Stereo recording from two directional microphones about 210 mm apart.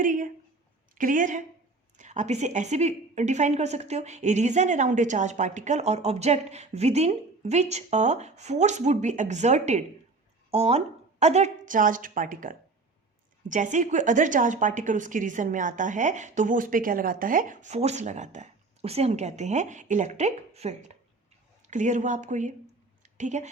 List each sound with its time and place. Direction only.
0.0 s a woman's voice: 40° right (ahead or behind)